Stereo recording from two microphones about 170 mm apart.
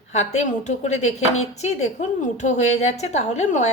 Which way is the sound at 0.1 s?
40° left (ahead or behind).